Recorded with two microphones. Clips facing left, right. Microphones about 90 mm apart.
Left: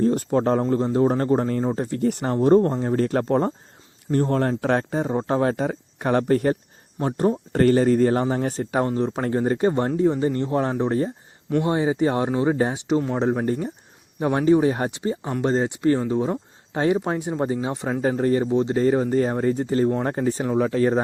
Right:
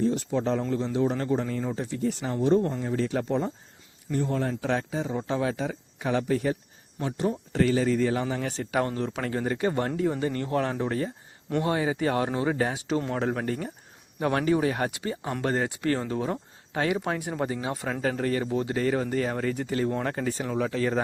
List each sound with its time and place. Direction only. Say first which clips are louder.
0.0 s speech: left 6 dB; 50° left (ahead or behind)